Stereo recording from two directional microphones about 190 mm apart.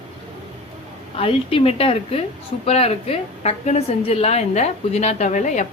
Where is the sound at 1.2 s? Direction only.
30° left (ahead or behind).